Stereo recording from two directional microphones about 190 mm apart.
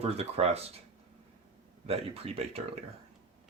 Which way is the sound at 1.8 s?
30° right (ahead or behind).